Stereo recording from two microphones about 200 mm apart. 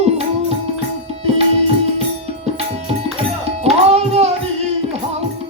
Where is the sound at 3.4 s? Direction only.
30° right (ahead or behind).